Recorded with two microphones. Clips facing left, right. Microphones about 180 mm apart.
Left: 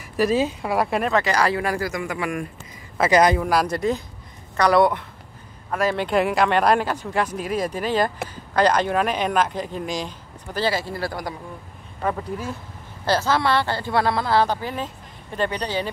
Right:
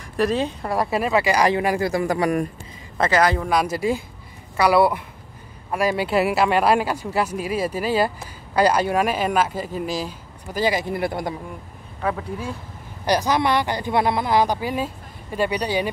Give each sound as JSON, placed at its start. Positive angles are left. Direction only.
{"t": 0.2, "sound": "speech", "side_deg": 5}
{"t": 1.9, "sound": "speech", "side_deg": -35}
{"t": 3.1, "sound": "speech", "side_deg": 20}
{"t": 3.3, "sound": "speech", "side_deg": 0}
{"t": 12.0, "sound": "speech", "side_deg": 0}
{"t": 13.0, "sound": "speech", "side_deg": -15}